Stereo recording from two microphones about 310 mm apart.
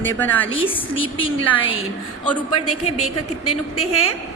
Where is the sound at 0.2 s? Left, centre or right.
Centre.